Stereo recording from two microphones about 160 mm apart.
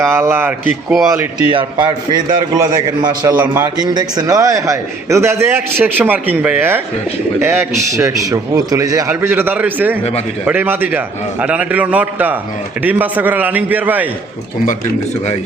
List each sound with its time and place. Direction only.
0.0 s a man's voice: 15° right (ahead or behind)
0.9 s speech: centre (ahead or behind)
1.5 s a man's voice: 25° right (ahead or behind); by 14.1 s 10° right (ahead or behind)